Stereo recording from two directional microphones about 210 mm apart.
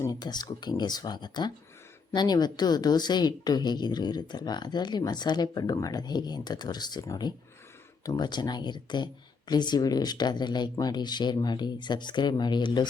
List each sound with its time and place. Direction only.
0.0 s speech: 20° left (ahead or behind)